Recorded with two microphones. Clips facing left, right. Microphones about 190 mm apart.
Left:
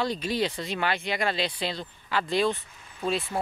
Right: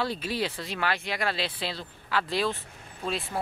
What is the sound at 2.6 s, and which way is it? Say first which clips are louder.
Vehicle: right 4 dB; 50° right (ahead or behind).